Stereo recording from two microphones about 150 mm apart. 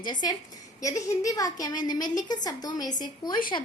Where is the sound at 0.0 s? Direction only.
30° left (ahead or behind).